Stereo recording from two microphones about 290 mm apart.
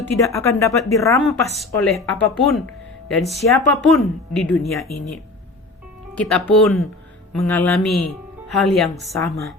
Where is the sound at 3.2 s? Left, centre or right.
Centre.